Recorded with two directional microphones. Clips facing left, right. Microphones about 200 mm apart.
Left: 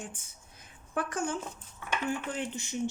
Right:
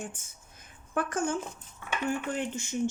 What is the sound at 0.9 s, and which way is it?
Speech, 50° right (ahead or behind).